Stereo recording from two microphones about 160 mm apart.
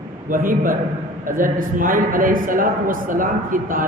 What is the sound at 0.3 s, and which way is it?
A man's voice, 60° right (ahead or behind).